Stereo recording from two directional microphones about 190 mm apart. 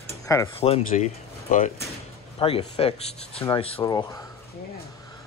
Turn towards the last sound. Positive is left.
turn(degrees=20)  # may be behind; listen again after turning